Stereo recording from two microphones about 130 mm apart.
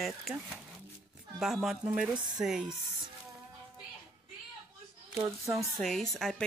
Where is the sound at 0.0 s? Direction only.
Centre (ahead or behind).